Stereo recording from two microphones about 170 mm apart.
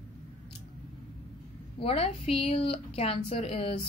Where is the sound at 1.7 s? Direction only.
35° left (ahead or behind).